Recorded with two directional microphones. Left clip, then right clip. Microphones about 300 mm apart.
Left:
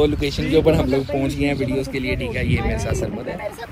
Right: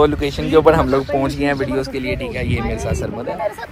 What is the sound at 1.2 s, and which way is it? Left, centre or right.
Speech, centre.